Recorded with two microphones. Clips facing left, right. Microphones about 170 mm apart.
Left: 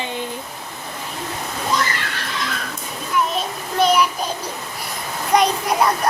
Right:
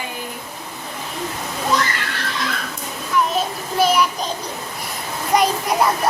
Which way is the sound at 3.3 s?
5° right (ahead or behind).